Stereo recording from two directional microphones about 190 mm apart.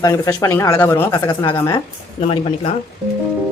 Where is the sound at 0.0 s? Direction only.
20° left (ahead or behind).